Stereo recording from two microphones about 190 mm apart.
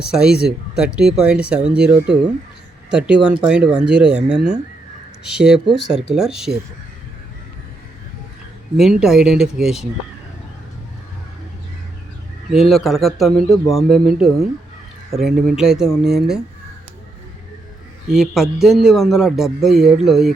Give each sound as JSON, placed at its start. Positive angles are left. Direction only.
{"t": 0.1, "sound": "a man's voice", "side_deg": -5}
{"t": 8.8, "sound": "a man's voice", "side_deg": 0}
{"t": 12.5, "sound": "a man's voice", "side_deg": 0}
{"t": 18.1, "sound": "a man's voice", "side_deg": 0}